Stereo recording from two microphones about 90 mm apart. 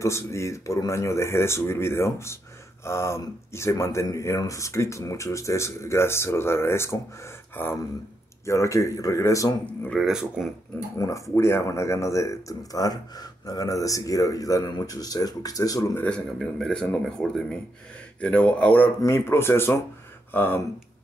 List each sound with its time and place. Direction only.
0.0 s a man's voice: 30° left (ahead or behind)
8.5 s a man's voice: 35° left (ahead or behind)
9.9 s speech: 5° right (ahead or behind)
11.0 s a man's voice: 40° left (ahead or behind)
16.1 s speech: 10° left (ahead or behind)
19.0 s speech: 25° left (ahead or behind)